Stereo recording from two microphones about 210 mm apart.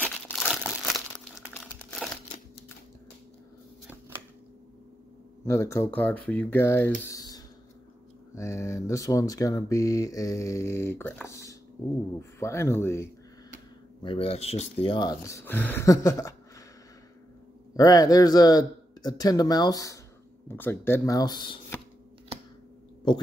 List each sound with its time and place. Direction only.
0.0 s crumpling: 10° left (ahead or behind)
5.4 s speech: 15° left (ahead or behind)
7.0 s a sound: 15° left (ahead or behind)
8.4 s speech: 15° left (ahead or behind)
11.2 s a sound: 15° left (ahead or behind)
12.2 s speech: 15° left (ahead or behind)
14.0 s speech: 25° left (ahead or behind)
17.7 s speech: 15° left (ahead or behind)